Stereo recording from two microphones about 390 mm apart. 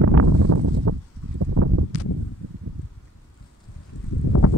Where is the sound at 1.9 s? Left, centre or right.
Left.